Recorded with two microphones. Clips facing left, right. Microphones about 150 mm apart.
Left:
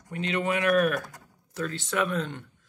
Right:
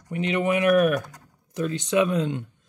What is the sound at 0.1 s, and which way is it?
Speech, 15° right (ahead or behind).